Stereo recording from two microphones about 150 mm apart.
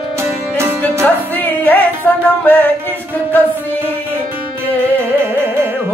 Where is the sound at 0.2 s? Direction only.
15° right (ahead or behind).